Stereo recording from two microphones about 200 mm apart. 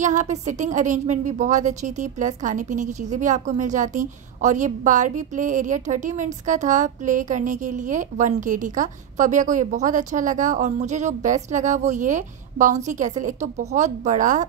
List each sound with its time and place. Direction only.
0.0 s a woman's voice: 35° right (ahead or behind)